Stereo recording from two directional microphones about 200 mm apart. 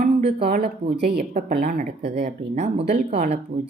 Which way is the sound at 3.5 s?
30° right (ahead or behind).